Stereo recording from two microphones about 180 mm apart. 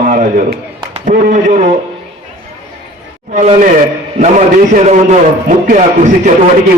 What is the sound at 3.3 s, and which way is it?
Speech, 40° right (ahead or behind).